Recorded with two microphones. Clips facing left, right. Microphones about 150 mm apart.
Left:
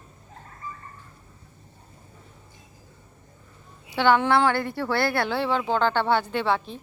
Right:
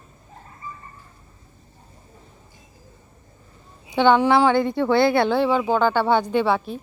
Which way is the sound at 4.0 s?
15° right (ahead or behind).